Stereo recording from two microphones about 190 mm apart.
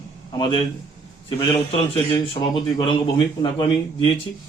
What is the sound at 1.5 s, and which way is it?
Speech, 30° left (ahead or behind).